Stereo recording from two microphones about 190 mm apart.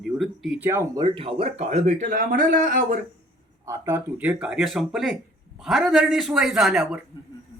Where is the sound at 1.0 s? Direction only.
30° right (ahead or behind); by 3.0 s 45° right (ahead or behind).